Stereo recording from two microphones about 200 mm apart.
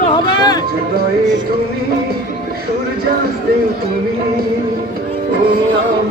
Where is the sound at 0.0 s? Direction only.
20° left (ahead or behind).